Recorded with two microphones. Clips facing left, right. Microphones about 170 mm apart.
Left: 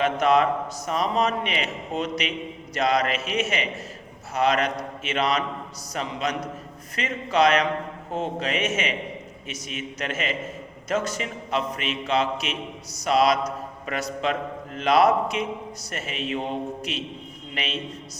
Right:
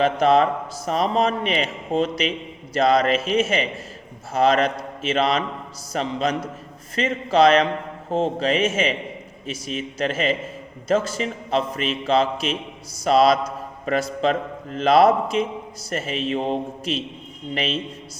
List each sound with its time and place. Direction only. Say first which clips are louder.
0.0 s a man's voice: right 3 dB; 30° right (ahead or behind)